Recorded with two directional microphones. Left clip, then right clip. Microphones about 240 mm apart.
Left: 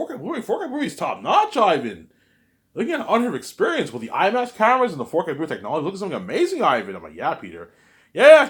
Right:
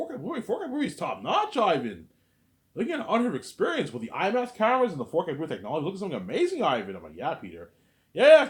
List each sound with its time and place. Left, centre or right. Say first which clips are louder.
0.1 s speech: left 6 dB; left